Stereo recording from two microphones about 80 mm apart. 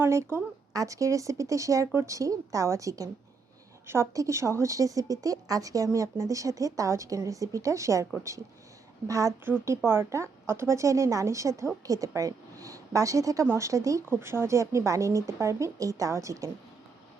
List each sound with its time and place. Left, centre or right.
0.0 s a woman's voice: right
0.7 s a woman's voice: right
3.8 s a woman's voice: right
9.0 s a woman's voice: right
9.6 s a woman's voice: right
14.0 s a woman's voice: right